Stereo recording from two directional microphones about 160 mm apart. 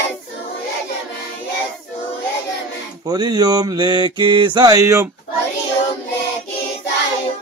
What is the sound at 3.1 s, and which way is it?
Mantra, 25° right (ahead or behind).